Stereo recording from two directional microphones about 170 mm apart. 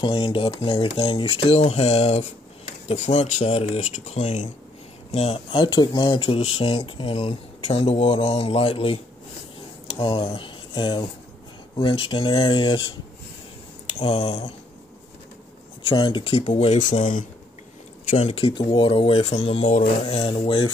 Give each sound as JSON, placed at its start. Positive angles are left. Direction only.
{"t": 0.0, "sound": "speech", "side_deg": 30}
{"t": 13.9, "sound": "speech", "side_deg": 35}
{"t": 15.8, "sound": "speech", "side_deg": 30}
{"t": 18.1, "sound": "speech", "side_deg": 35}